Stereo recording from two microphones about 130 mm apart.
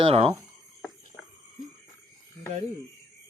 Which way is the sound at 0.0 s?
50° right (ahead or behind).